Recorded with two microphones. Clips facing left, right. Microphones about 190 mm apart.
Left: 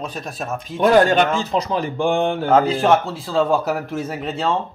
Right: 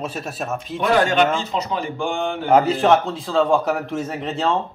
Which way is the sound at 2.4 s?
15° right (ahead or behind).